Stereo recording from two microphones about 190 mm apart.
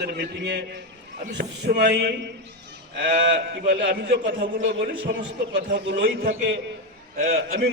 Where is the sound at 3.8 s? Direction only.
50° right (ahead or behind).